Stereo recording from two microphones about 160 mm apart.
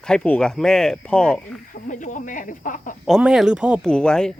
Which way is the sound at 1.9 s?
50° left (ahead or behind).